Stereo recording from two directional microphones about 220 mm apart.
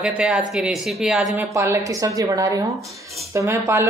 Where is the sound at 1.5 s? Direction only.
10° right (ahead or behind).